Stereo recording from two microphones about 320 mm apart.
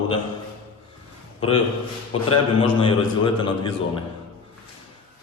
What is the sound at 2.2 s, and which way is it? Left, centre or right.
Speech, centre.